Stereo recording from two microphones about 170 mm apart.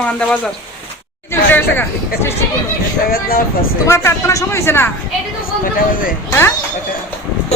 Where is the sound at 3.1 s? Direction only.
60° left (ahead or behind).